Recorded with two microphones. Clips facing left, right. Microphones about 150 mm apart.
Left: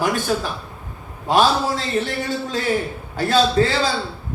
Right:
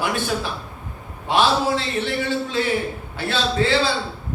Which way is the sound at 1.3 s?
40° left (ahead or behind).